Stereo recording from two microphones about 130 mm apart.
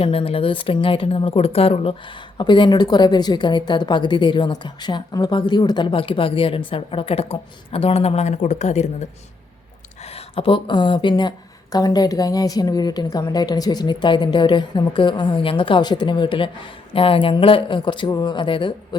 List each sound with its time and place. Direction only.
0.0 s a woman's voice: 45° left (ahead or behind); by 9.0 s 60° left (ahead or behind)
10.0 s speech: 50° left (ahead or behind)